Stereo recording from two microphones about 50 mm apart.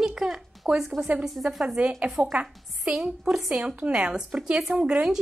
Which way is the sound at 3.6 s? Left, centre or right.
Right.